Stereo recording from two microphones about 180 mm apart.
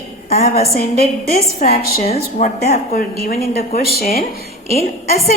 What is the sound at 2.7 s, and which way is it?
A woman's voice, 55° left (ahead or behind).